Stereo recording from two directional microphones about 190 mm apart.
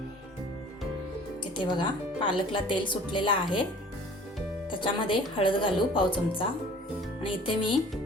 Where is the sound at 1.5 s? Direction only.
25° left (ahead or behind).